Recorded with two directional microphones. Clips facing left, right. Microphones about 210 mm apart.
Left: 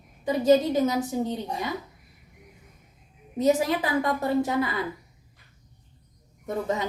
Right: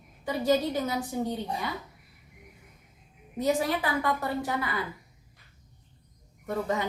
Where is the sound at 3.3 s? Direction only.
20° left (ahead or behind).